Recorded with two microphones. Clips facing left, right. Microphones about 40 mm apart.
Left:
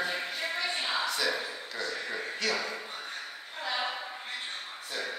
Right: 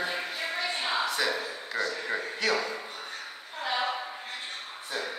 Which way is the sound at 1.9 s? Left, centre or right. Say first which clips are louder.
Right 3 dB; centre.